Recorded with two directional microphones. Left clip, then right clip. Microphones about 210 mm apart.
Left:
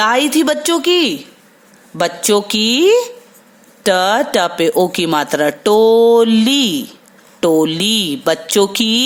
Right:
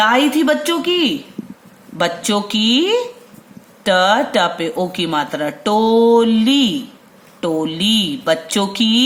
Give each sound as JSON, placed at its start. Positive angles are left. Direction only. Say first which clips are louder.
{"t": 0.0, "sound": "speech", "louder": "left 1 dB", "side_deg": 45}